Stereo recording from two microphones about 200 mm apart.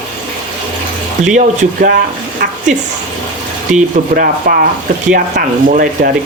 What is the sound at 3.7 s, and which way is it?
Speech, 45° right (ahead or behind).